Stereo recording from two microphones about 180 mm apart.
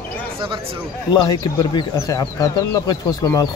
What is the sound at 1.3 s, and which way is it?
Speech, 20° left (ahead or behind).